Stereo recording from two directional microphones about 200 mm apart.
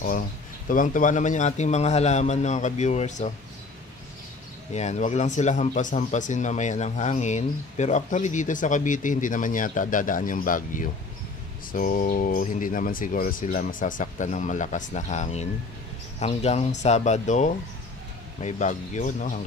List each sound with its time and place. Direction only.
0.7 s speech: 40° left (ahead or behind)
4.7 s speech: 35° left (ahead or behind)